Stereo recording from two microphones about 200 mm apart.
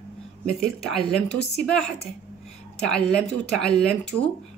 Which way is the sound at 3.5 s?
5° left (ahead or behind).